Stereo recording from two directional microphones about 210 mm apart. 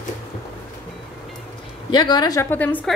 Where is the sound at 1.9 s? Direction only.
20° left (ahead or behind).